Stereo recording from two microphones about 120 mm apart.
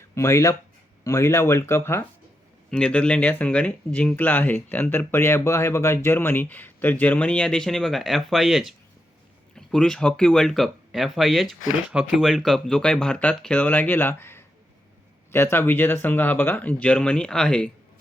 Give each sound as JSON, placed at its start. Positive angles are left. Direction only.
{"t": 0.1, "sound": "speech", "side_deg": 25}
{"t": 2.6, "sound": "speech", "side_deg": 5}